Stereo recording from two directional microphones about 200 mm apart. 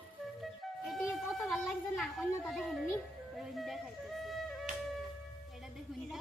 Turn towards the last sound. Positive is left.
turn(degrees=0)  # may be behind; listen again after turning